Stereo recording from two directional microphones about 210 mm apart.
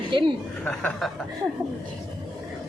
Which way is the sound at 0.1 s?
20° right (ahead or behind).